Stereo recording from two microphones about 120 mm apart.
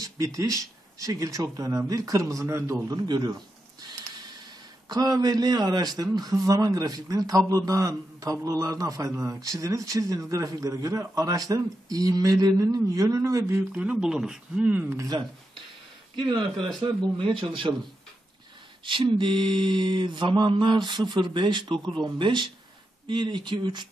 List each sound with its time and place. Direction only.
0.0 s a man's voice: 25° right (ahead or behind)
3.1 s mantra: 35° right (ahead or behind)
4.8 s mantra: 35° right (ahead or behind)
6.1 s a man's voice: 30° right (ahead or behind)
13.7 s speech: 10° right (ahead or behind)
15.0 s mantra: 35° right (ahead or behind)
16.5 s a man's voice: centre (ahead or behind)
17.4 s a man's voice: 45° right (ahead or behind)
18.9 s mantra: 40° right (ahead or behind)